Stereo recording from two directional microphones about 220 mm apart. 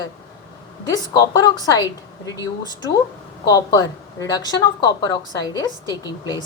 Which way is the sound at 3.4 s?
15° left (ahead or behind).